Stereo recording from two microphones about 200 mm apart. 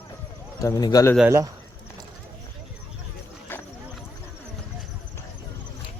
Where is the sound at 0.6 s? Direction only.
20° left (ahead or behind).